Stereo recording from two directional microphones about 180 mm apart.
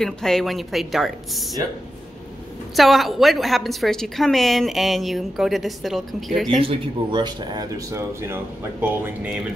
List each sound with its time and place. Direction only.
0.0 s a woman's voice: 5° left (ahead or behind)
2.7 s a woman's voice: centre (ahead or behind)
6.6 s speech: 30° right (ahead or behind)